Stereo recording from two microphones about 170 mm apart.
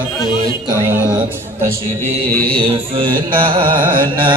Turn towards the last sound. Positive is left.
turn(degrees=-30)  # may be behind; listen again after turning